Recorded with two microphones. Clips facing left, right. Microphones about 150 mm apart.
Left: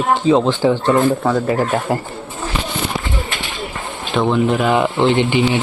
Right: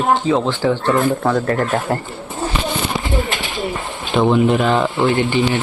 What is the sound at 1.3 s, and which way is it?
Speech, centre (ahead or behind).